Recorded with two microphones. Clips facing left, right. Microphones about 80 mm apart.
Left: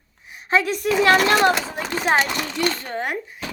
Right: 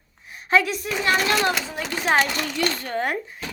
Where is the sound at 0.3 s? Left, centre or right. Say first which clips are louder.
Even; left.